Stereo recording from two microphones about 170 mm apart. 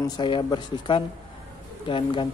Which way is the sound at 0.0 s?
30° left (ahead or behind).